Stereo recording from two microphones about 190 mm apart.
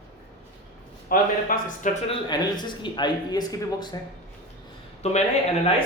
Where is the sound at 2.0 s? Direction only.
25° left (ahead or behind).